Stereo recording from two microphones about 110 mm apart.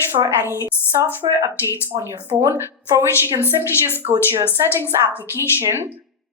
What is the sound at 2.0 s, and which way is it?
A woman's voice, 25° right (ahead or behind).